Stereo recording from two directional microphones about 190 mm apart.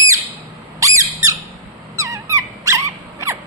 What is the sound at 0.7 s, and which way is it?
Squeak, 15° right (ahead or behind).